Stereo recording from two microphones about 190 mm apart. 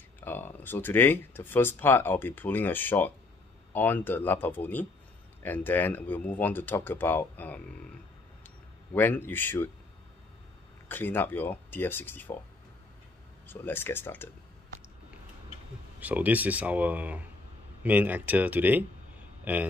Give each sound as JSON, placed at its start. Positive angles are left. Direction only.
{"t": 0.2, "sound": "speech", "side_deg": 10}
{"t": 8.9, "sound": "speech", "side_deg": 10}
{"t": 10.9, "sound": "speech", "side_deg": 10}
{"t": 13.5, "sound": "speech", "side_deg": 10}
{"t": 16.0, "sound": "a man's voice", "side_deg": -10}